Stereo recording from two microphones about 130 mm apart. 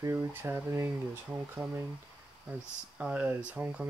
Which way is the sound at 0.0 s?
20° right (ahead or behind).